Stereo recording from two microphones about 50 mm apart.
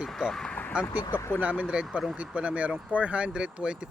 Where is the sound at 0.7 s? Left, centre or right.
Right.